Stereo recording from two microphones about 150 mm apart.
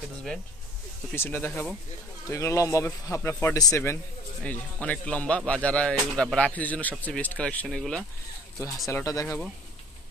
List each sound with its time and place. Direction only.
1.1 s a man's voice: 15° left (ahead or behind)
8.8 s speech: 20° left (ahead or behind)